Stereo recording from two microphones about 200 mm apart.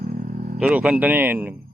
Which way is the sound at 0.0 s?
40° right (ahead or behind).